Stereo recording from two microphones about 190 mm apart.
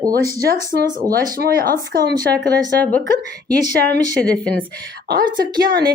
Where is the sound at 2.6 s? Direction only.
10° left (ahead or behind).